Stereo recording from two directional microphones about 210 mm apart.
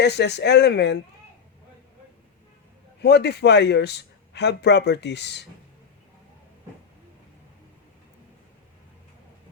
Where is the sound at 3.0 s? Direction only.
50° left (ahead or behind).